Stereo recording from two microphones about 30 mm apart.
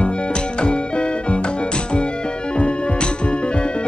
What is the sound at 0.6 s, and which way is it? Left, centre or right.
Music, left.